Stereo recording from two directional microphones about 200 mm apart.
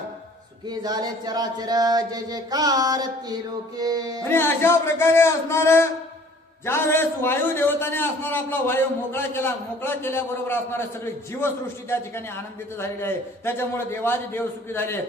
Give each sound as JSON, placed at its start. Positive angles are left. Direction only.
{"t": 0.7, "sound": "chant", "side_deg": -20}
{"t": 4.2, "sound": "a man's voice", "side_deg": 10}
{"t": 13.0, "sound": "a man's voice", "side_deg": 10}